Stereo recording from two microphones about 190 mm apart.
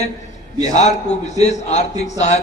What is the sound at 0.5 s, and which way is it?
Speech, 20° right (ahead or behind).